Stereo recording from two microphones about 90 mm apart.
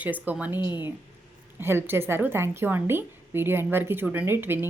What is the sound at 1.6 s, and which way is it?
Speech, 25° right (ahead or behind).